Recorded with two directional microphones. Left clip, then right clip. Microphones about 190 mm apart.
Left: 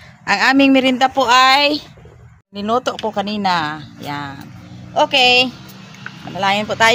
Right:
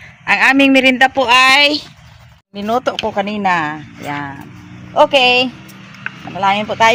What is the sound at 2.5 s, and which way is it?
Speech, centre (ahead or behind).